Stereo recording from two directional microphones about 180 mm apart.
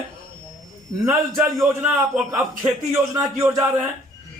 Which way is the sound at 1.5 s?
15° right (ahead or behind).